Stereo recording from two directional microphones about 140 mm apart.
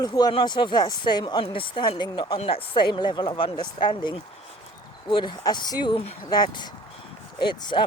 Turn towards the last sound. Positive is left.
turn(degrees=35)  # may be behind; listen again after turning